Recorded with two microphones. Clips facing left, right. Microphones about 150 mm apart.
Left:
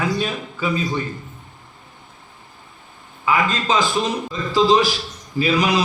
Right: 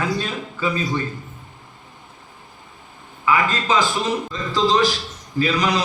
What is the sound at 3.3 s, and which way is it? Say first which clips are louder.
A man's voice: even; 20° left (ahead or behind).